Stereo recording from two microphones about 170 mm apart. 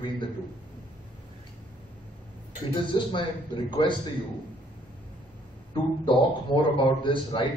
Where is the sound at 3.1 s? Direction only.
30° left (ahead or behind).